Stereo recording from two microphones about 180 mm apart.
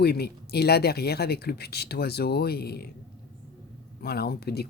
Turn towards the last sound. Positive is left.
turn(degrees=60)  # may be behind; listen again after turning